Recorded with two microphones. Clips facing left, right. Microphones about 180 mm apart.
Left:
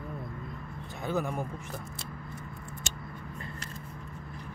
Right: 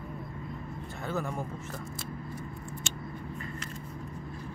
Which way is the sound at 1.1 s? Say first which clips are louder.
Left 3 dB; 15° left (ahead or behind).